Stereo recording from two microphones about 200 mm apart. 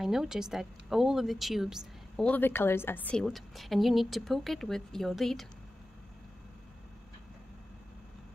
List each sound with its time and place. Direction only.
0.0 s a woman's voice: centre (ahead or behind)